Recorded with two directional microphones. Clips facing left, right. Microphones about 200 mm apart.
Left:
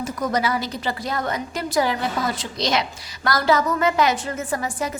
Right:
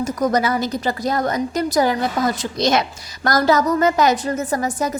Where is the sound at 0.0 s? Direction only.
45° right (ahead or behind).